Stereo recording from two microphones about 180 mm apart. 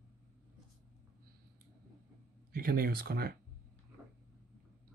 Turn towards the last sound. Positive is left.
turn(degrees=-55)  # may be behind; listen again after turning